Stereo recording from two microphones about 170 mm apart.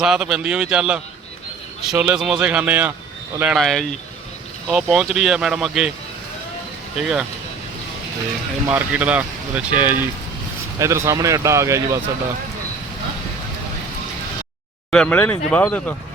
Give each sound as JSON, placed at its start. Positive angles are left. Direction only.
{"t": 0.0, "sound": "speech", "side_deg": -5}
{"t": 6.9, "sound": "speech", "side_deg": -5}
{"t": 8.7, "sound": "speech", "side_deg": -10}
{"t": 14.8, "sound": "speech", "side_deg": 5}